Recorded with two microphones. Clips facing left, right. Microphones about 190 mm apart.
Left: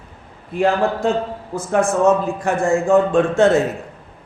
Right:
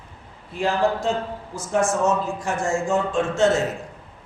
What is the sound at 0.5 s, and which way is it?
A man's voice, 55° left (ahead or behind).